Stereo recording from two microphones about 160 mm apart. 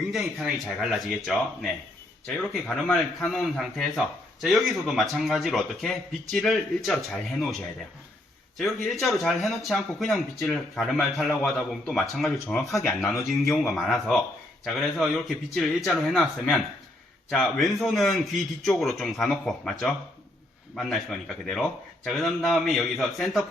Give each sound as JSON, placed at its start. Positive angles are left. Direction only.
{"t": 0.1, "sound": "speech", "side_deg": 0}